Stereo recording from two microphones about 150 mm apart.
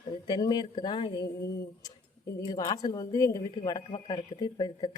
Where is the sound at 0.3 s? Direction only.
25° left (ahead or behind).